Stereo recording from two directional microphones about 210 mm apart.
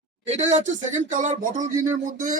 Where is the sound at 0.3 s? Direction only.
35° right (ahead or behind).